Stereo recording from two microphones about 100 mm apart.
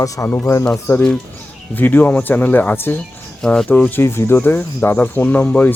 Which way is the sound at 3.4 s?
5° left (ahead or behind).